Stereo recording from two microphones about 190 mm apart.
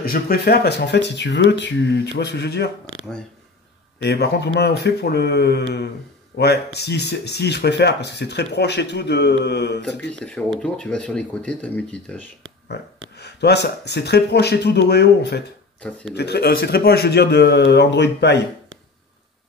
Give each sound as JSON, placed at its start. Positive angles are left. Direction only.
{"t": 0.0, "sound": "speech", "side_deg": 55}
{"t": 4.0, "sound": "speech", "side_deg": 60}
{"t": 10.2, "sound": "speech", "side_deg": 5}
{"t": 13.2, "sound": "speech", "side_deg": 60}